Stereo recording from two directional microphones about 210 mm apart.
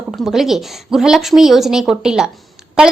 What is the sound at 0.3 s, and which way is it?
A woman's voice, centre (ahead or behind).